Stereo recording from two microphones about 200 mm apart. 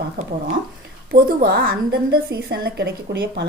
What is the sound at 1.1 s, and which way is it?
A woman's voice, 50° right (ahead or behind).